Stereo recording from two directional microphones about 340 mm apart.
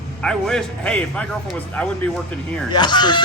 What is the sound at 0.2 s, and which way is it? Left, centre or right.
A man's voice, centre.